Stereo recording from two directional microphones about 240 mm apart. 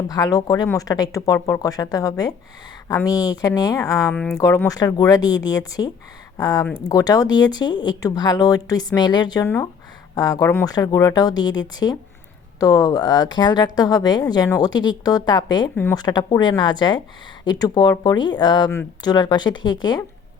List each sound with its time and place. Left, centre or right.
0.1 s a woman's voice: centre